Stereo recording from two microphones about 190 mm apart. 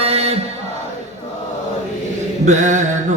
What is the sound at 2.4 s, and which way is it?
Mantra, 40° right (ahead or behind).